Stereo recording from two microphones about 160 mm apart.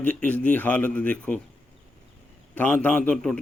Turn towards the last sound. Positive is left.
turn(degrees=5)  # may be behind; listen again after turning